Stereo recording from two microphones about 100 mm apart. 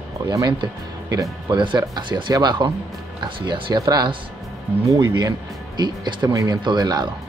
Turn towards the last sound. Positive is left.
turn(degrees=-45)  # may be behind; listen again after turning